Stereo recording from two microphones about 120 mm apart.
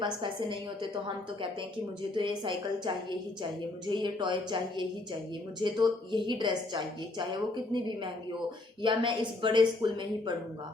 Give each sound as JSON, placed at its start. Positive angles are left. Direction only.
{"t": 0.0, "sound": "a woman's voice", "side_deg": -40}